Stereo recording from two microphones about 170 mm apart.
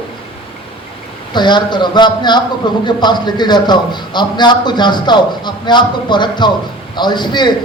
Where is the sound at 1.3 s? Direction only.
25° left (ahead or behind).